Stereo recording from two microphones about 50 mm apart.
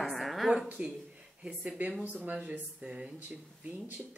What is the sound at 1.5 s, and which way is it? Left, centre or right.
Speech, right.